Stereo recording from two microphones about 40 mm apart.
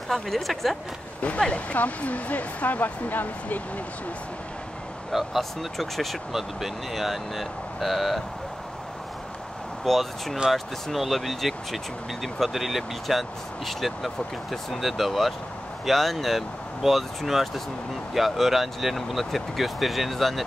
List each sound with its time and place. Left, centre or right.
0.1 s speech: centre
1.2 s speech: left
5.1 s speech: centre
9.8 s speech: centre